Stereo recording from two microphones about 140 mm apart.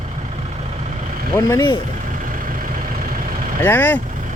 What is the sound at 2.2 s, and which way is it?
Vehicle, 75° right (ahead or behind).